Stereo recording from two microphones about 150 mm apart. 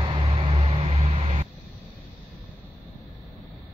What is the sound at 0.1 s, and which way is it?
Vehicle, 35° right (ahead or behind).